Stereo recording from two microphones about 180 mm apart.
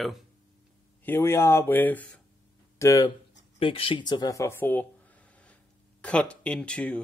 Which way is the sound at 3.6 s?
30° left (ahead or behind).